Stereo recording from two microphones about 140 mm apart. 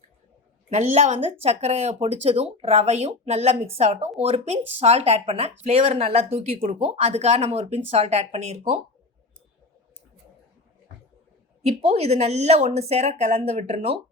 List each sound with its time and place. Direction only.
0.7 s speech: 55° right (ahead or behind)
11.6 s speech: 50° right (ahead or behind)